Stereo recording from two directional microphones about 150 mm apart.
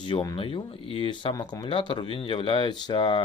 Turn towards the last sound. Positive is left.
turn(degrees=35)  # may be behind; listen again after turning